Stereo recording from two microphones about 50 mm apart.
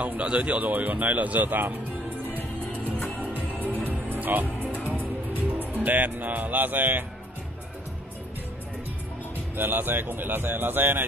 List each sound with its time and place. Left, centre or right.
0.0 s speech: right
3.2 s music: right
9.6 s speech: right